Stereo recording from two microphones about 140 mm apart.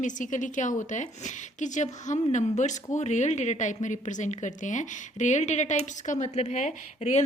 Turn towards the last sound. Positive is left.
turn(degrees=55)  # may be behind; listen again after turning